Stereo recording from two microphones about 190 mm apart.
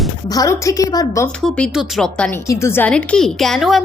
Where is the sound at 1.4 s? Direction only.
Centre (ahead or behind).